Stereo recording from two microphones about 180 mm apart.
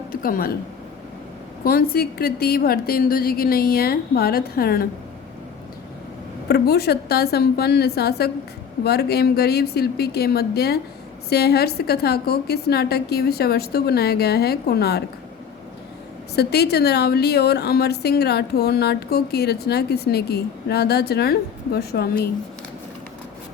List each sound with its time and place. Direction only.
0.1 s speech: 50° left (ahead or behind)
1.6 s a woman's voice: 55° left (ahead or behind)
6.5 s a woman's voice: 60° left (ahead or behind)
16.3 s a woman's voice: 65° left (ahead or behind)